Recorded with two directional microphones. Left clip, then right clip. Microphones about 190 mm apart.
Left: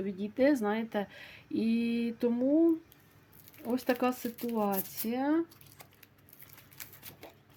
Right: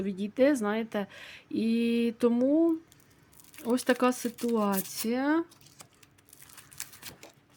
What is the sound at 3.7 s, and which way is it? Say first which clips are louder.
Speech: right 4 dB; 35° right (ahead or behind).